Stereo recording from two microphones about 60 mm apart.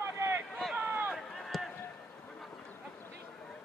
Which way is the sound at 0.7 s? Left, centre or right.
Right.